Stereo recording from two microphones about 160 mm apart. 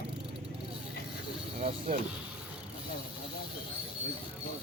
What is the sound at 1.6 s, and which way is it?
Speech, 40° right (ahead or behind).